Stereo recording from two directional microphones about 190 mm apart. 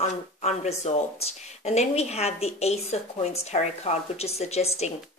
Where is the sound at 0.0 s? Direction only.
35° left (ahead or behind).